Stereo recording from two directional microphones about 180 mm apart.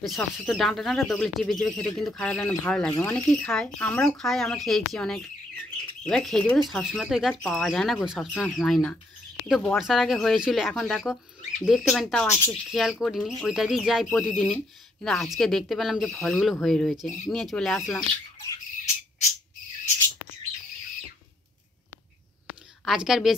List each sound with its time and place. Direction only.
0.0 s speech: centre (ahead or behind)
2.9 s speech: 15° left (ahead or behind)
3.2 s speech: 5° left (ahead or behind)
17.7 s speech: 15° left (ahead or behind)
22.8 s speech: centre (ahead or behind)